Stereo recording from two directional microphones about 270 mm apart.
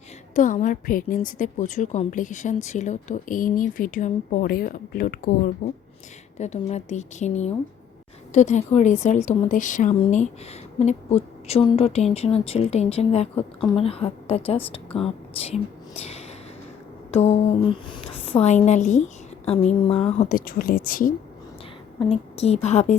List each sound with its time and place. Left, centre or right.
0.3 s speech: left
21.9 s speech: left